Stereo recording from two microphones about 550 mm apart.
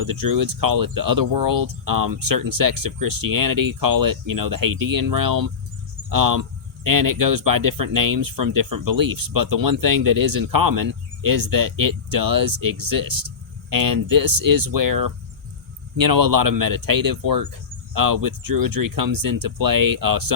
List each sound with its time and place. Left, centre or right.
0.0 s speech: right
1.6 s speech: right
13.7 s speech: right